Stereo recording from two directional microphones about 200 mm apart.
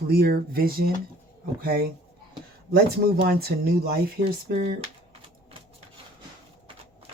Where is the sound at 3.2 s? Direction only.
50° right (ahead or behind).